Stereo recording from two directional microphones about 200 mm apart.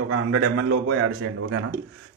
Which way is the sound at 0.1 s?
90° right.